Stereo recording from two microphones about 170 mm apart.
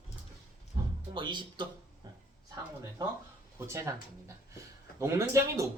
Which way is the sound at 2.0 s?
25° right (ahead or behind).